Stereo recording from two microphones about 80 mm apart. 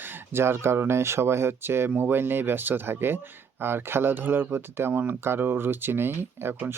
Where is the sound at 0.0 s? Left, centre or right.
Right.